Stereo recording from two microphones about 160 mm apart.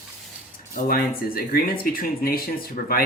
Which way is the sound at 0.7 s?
60° left (ahead or behind).